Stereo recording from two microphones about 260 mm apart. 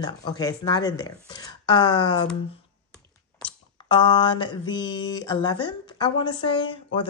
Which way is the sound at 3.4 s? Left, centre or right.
Centre.